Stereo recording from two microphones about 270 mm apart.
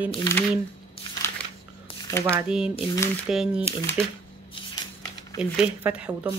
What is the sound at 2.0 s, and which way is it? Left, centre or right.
Shuffling cards, centre.